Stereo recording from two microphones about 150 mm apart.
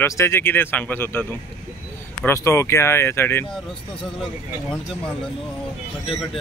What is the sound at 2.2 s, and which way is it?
Speech, 20° left (ahead or behind).